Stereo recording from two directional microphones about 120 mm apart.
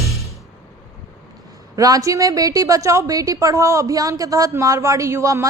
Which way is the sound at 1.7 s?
30° right (ahead or behind).